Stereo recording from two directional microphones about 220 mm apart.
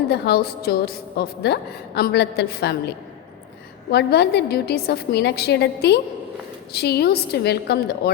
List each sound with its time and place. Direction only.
0.1 s a woman's voice: 45° left (ahead or behind)
3.9 s a woman's voice: 50° left (ahead or behind)